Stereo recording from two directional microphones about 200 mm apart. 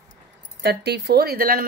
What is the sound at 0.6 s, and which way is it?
Speech, 55° right (ahead or behind).